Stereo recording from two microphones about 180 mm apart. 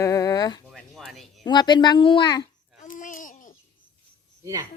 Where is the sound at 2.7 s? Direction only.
45° left (ahead or behind).